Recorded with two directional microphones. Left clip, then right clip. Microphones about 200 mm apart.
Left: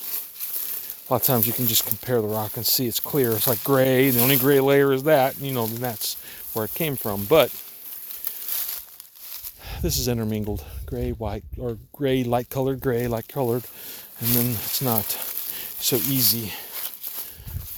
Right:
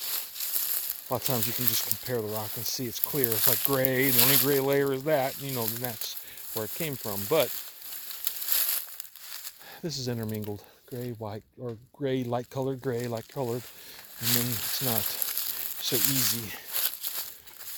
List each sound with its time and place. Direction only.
1.0 s speech: 45° left (ahead or behind)
8.2 s crumpling: 15° right (ahead or behind)
9.6 s speech: 55° left (ahead or behind)
16.0 s speech: centre (ahead or behind)
16.7 s walk: 15° right (ahead or behind)